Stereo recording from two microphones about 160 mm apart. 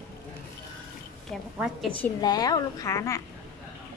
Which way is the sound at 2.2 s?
25° left (ahead or behind).